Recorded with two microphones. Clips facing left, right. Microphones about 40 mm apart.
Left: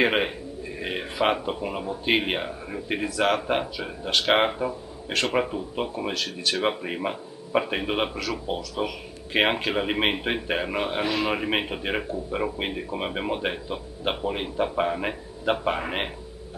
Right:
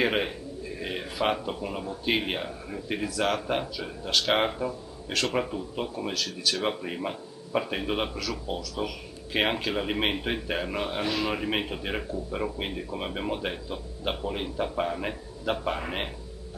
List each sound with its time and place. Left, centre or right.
0.0 s a man's voice: left